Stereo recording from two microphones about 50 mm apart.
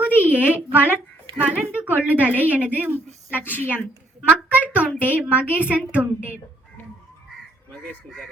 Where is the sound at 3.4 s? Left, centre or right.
Left.